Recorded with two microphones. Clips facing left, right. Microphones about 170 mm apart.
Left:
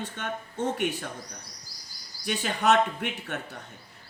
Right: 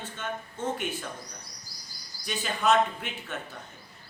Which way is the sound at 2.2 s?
60° left (ahead or behind).